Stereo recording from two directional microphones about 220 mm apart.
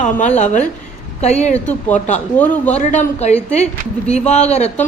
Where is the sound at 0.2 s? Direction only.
35° left (ahead or behind).